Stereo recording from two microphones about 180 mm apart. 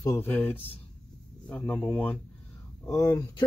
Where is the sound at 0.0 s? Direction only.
10° left (ahead or behind).